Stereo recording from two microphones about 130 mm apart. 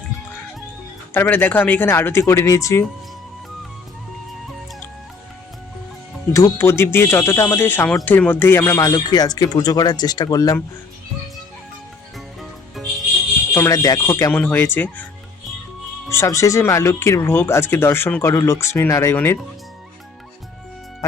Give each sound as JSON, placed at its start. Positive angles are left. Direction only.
{"t": 1.1, "sound": "speech", "side_deg": 15}
{"t": 6.3, "sound": "speech", "side_deg": 20}
{"t": 12.1, "sound": "music", "side_deg": 0}
{"t": 13.5, "sound": "speech", "side_deg": 25}
{"t": 16.0, "sound": "speech", "side_deg": 20}